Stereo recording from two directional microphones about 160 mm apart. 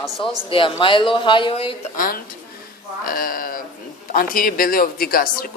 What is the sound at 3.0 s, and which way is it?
Speech, 60° left (ahead or behind).